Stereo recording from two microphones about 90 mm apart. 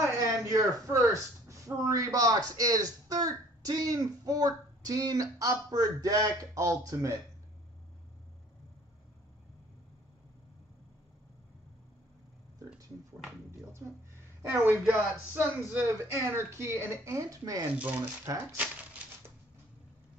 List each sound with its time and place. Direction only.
0.0 s speech: 40° right (ahead or behind)
14.9 s speech: 20° right (ahead or behind); by 17.6 s 40° right (ahead or behind)
17.7 s speech: 15° right (ahead or behind)
18.3 s speech: 40° right (ahead or behind)